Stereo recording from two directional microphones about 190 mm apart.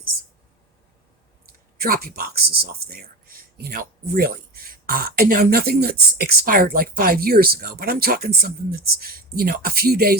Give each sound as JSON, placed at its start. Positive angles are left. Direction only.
{"t": 1.8, "sound": "speech", "side_deg": -50}